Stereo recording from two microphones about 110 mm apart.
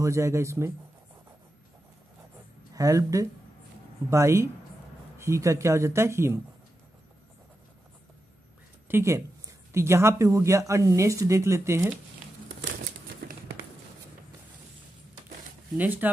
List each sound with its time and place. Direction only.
0.0 s speech: 25° right (ahead or behind)
2.7 s speech: 30° right (ahead or behind)
8.8 s speech: 25° right (ahead or behind)
15.8 s speech: 15° right (ahead or behind)